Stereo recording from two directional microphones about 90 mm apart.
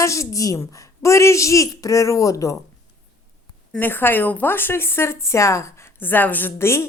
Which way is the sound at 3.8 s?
25° left (ahead or behind).